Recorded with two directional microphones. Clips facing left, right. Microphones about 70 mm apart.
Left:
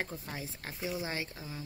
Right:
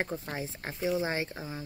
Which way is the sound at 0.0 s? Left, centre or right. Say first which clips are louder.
Right 5 dB; right.